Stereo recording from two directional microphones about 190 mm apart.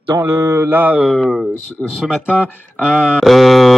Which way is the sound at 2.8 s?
5° right (ahead or behind).